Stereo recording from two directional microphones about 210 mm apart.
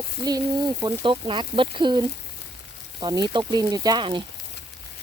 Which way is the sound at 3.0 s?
20° right (ahead or behind).